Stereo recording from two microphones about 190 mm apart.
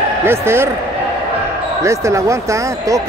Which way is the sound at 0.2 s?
15° right (ahead or behind).